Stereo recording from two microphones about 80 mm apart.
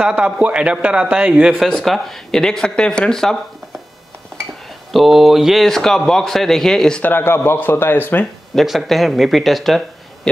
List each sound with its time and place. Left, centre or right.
0.1 s a man's voice: centre
1.6 s a man's voice: centre
4.9 s a man's voice: centre
7.0 s speech: left
8.5 s a man's voice: centre